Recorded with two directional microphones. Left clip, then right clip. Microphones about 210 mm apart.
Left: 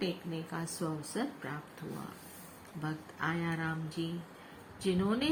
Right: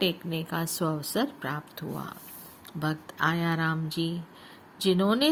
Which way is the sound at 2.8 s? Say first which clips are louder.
Right 9 dB; 45° right (ahead or behind).